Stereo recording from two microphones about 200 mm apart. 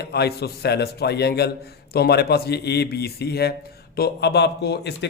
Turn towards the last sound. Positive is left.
turn(degrees=55)  # may be behind; listen again after turning